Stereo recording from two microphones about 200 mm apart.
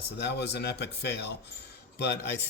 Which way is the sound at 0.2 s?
55° left (ahead or behind).